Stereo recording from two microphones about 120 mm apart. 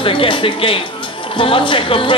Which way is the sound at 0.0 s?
45° left (ahead or behind).